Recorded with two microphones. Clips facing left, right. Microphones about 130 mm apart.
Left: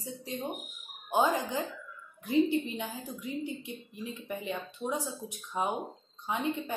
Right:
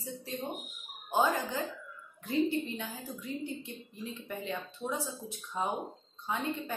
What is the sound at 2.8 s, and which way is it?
Speech, 15° left (ahead or behind).